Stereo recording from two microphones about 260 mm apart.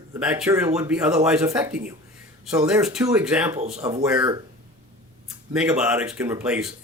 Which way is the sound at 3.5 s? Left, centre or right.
Right.